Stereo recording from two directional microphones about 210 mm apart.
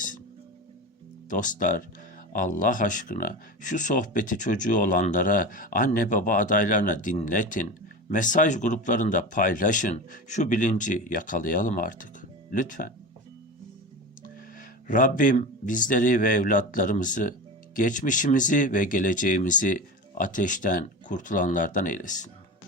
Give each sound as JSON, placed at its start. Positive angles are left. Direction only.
{"t": 1.3, "sound": "speech", "side_deg": 40}
{"t": 14.8, "sound": "speech", "side_deg": 40}